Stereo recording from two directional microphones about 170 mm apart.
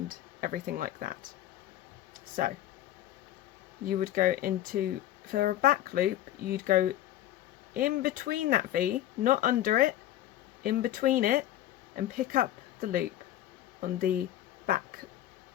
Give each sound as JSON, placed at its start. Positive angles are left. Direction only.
{"t": 0.1, "sound": "speech", "side_deg": -60}
{"t": 2.4, "sound": "speech", "side_deg": -60}
{"t": 3.8, "sound": "speech", "side_deg": -55}
{"t": 14.7, "sound": "a sound", "side_deg": -60}